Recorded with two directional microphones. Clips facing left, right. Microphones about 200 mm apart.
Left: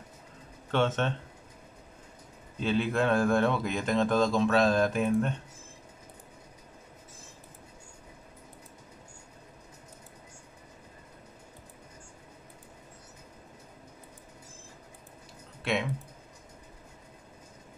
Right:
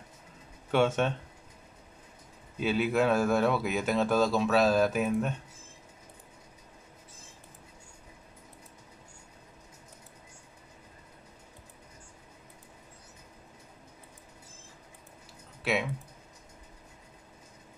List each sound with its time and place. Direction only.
0.7 s speech: 10° right (ahead or behind)
2.6 s speech: 5° right (ahead or behind)
15.6 s speech: 5° right (ahead or behind)